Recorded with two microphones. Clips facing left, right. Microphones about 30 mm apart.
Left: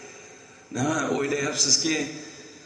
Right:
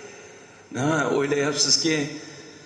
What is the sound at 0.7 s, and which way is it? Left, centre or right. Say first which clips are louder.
A man's voice: right 3 dB; right.